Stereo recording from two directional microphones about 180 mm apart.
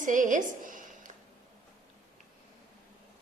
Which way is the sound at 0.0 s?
45° right (ahead or behind).